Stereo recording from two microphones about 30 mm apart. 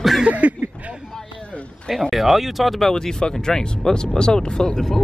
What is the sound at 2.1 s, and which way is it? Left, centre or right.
Speech, centre.